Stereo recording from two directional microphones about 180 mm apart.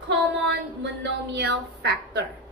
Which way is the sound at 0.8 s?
75° right (ahead or behind).